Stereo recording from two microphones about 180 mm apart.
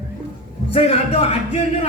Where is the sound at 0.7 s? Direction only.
30° left (ahead or behind).